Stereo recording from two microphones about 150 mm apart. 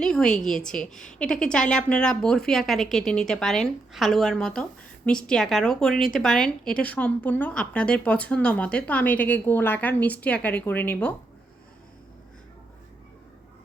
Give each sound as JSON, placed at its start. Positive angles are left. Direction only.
{"t": 0.0, "sound": "a woman's voice", "side_deg": 5}